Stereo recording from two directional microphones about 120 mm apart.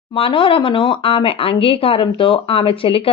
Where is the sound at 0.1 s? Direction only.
50° left (ahead or behind).